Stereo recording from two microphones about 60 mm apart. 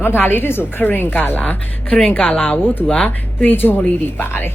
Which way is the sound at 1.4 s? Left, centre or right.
Left.